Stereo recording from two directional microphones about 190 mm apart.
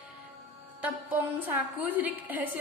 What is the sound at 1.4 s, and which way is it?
A woman's voice, 10° right (ahead or behind).